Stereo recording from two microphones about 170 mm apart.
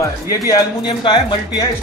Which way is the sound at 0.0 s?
20° left (ahead or behind).